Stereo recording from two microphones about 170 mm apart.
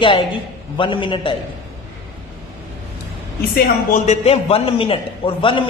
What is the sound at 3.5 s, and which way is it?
Speech, 60° left (ahead or behind).